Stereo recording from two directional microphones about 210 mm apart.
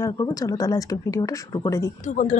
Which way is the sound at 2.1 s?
35° left (ahead or behind).